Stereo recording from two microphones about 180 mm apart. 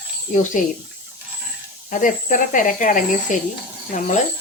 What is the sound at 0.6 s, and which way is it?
Speech, 45° left (ahead or behind).